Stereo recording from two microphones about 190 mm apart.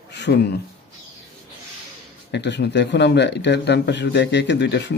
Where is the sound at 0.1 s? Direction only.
60° left (ahead or behind).